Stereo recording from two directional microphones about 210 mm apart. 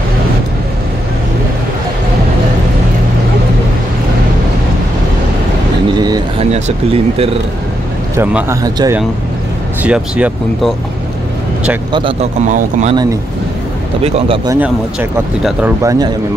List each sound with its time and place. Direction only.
5.9 s a sound: 20° right (ahead or behind)
6.5 s speech: 30° right (ahead or behind)
8.2 s speech: 10° right (ahead or behind)
9.8 s speech: 5° right (ahead or behind)
11.9 s a man's voice: 25° right (ahead or behind)
14.0 s speech: 25° right (ahead or behind)
14.6 s speech: 5° right (ahead or behind)